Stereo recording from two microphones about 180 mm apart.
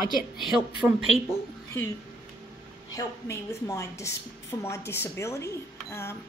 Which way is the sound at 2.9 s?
15° left (ahead or behind).